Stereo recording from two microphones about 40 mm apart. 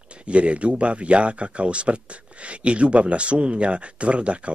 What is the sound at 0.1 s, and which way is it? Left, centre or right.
Speech, right.